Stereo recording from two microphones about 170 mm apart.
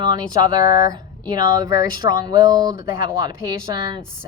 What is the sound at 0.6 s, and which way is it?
Speech, 20° right (ahead or behind).